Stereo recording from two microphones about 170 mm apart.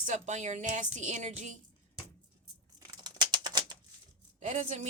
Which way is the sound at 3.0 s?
25° right (ahead or behind).